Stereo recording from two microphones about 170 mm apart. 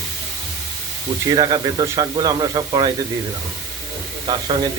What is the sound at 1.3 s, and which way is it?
Speech, 20° right (ahead or behind).